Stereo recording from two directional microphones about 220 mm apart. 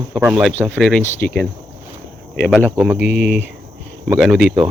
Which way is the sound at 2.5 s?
10° right (ahead or behind).